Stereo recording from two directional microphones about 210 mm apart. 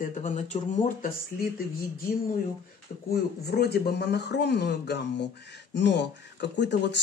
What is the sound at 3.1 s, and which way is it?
Speech, 50° left (ahead or behind).